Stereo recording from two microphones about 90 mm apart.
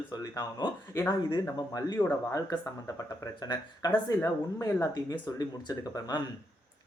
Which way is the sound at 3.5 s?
50° left (ahead or behind).